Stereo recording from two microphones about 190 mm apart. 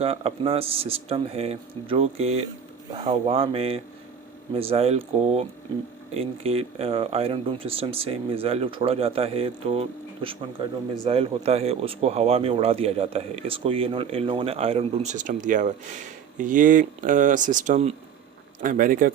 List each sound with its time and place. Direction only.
0.0 s speech: 30° right (ahead or behind); by 19.1 s 45° right (ahead or behind)